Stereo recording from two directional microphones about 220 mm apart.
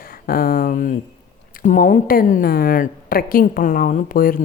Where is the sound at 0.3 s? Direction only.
40° left (ahead or behind).